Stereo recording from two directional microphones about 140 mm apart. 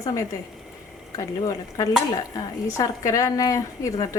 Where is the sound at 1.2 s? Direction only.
25° left (ahead or behind).